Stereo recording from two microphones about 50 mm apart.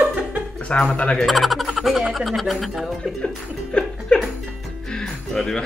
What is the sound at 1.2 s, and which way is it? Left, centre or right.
Speech, centre.